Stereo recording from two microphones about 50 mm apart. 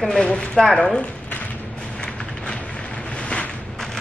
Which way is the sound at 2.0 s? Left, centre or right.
Centre.